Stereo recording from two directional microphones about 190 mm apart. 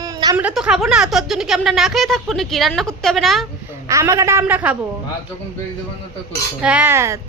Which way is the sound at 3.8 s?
15° right (ahead or behind).